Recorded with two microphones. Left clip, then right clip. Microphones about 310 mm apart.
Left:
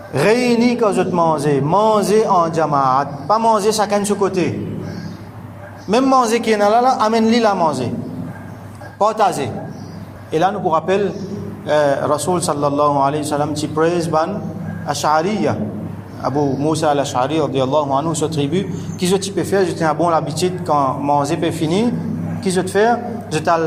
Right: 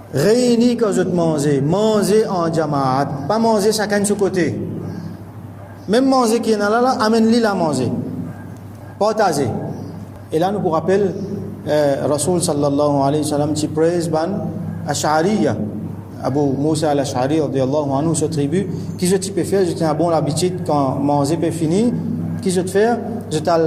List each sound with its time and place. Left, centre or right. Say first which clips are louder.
0.1 s a man's voice: even; centre
6.1 s a man's voice: left 2 dB; centre
9.0 s a man's voice: left 1 dB; centre
17.8 s a man's voice: left 2 dB; left
18.1 s a man's voice: even; centre